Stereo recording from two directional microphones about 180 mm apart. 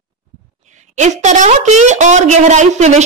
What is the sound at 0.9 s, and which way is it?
A woman's voice, 40° right (ahead or behind).